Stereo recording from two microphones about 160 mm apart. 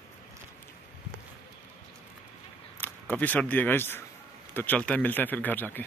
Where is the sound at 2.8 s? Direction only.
10° left (ahead or behind).